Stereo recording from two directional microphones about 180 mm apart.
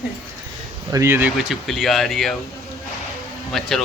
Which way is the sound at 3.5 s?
Centre (ahead or behind).